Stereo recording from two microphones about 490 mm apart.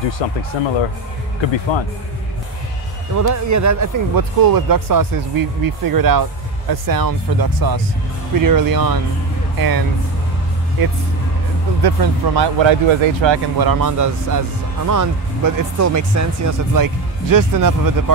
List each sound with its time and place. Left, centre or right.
0.2 s speech: left
1.7 s speech: left
3.2 s speech: right
11.8 s speech: right